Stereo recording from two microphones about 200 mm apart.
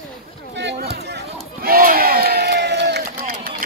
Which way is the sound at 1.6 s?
45° right (ahead or behind).